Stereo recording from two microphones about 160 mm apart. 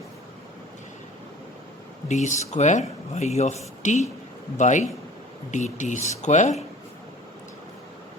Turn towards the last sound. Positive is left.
turn(degrees=45)  # may be behind; listen again after turning